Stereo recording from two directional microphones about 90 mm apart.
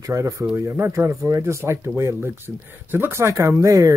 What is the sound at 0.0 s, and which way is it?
Speech, 35° right (ahead or behind).